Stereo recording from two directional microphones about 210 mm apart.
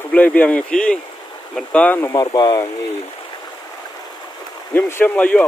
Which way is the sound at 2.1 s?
20° left (ahead or behind).